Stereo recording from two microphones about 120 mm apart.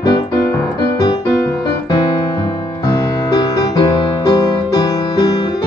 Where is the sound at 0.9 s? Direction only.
35° left (ahead or behind).